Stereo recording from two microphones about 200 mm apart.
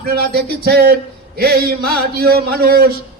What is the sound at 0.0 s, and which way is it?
A man's voice, 50° right (ahead or behind).